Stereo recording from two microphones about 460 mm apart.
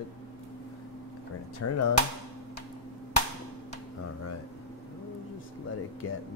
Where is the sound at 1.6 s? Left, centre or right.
Left.